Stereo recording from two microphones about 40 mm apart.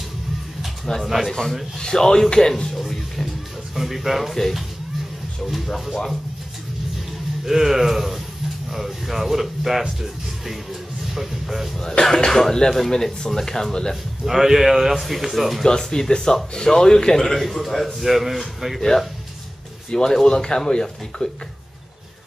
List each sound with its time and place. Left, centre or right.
0.9 s speech: centre
2.7 s music: centre
3.7 s speech: centre
4.3 s a man's voice: centre
7.4 s speech: centre
12.0 s speech: centre
14.2 s a man's voice: centre
15.6 s a man's voice: centre
18.8 s speech: centre